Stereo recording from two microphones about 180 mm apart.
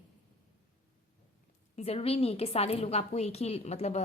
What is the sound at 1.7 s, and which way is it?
A woman's voice, 35° left (ahead or behind).